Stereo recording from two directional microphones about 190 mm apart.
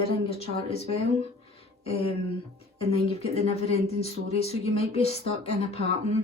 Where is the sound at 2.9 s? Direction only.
30° left (ahead or behind).